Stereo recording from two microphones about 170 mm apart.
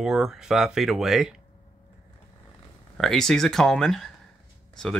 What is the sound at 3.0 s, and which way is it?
Speech, centre (ahead or behind).